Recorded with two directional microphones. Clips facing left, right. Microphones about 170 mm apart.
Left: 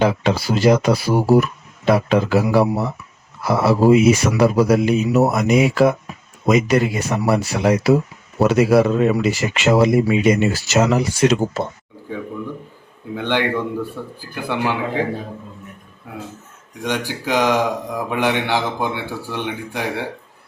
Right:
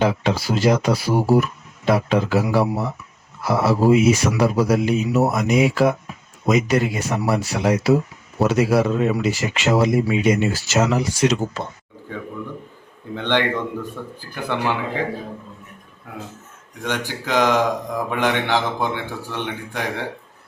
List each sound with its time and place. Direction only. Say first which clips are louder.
0.0 s speech: left 2 dB; 65° left (ahead or behind)
13.1 s speech: left 1 dB; 10° left (ahead or behind)
16.8 s speech: left 3 dB; 15° left (ahead or behind)